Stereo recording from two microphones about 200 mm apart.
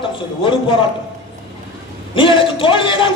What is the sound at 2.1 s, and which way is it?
A man's voice, 25° left (ahead or behind).